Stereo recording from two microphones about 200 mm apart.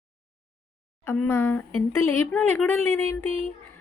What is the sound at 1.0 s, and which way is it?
A woman's voice, 10° left (ahead or behind).